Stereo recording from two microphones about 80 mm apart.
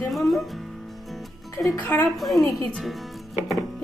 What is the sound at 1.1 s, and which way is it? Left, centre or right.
Music, centre.